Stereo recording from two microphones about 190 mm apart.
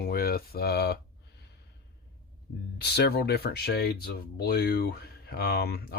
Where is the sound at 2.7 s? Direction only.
60° left (ahead or behind).